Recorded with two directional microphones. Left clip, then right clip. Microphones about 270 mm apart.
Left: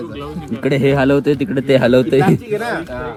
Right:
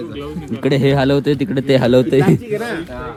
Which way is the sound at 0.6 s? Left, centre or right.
Right.